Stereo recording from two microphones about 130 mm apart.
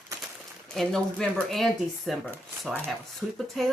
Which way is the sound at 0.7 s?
5° left (ahead or behind).